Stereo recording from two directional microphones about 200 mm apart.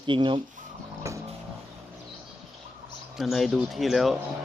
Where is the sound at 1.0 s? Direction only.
15° right (ahead or behind).